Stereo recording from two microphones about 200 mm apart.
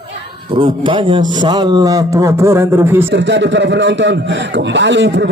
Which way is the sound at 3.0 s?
65° right (ahead or behind).